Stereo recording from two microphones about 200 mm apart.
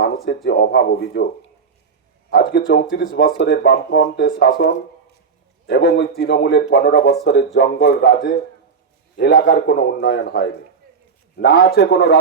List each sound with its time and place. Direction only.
0.4 s speech: 55° left (ahead or behind)
2.3 s speech: 55° left (ahead or behind)
11.3 s speech: 55° left (ahead or behind)